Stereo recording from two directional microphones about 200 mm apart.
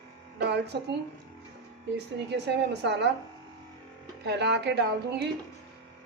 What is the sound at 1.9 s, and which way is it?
A woman's voice, 55° right (ahead or behind).